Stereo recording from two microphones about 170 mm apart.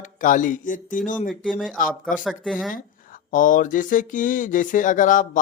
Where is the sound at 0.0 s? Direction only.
50° left (ahead or behind).